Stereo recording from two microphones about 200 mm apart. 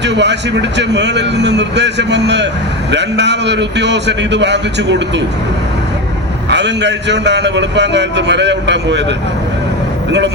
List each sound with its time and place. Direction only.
0.0 s a man's voice: 60° right (ahead or behind)
6.5 s a man's voice: 60° right (ahead or behind)